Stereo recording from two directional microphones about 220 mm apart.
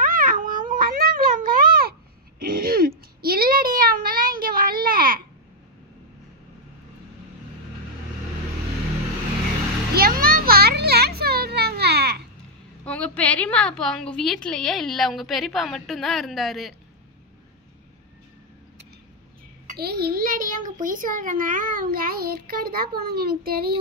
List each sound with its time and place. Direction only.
0.0 s cat: 40° right (ahead or behind)
2.4 s throat clearing: 40° right (ahead or behind)
3.2 s a sound: 40° right (ahead or behind)
9.9 s a sound: 45° right (ahead or behind)
12.8 s a woman's voice: 5° left (ahead or behind)
19.8 s a child's voice: 45° right (ahead or behind)